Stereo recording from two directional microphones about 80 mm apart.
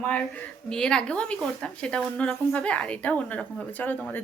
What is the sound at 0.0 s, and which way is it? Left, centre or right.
Speech, centre.